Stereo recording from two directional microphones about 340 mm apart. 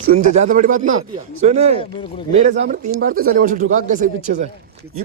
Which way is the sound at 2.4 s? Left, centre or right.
Right.